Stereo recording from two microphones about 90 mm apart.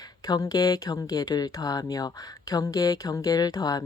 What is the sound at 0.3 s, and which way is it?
Speech, 45° left (ahead or behind).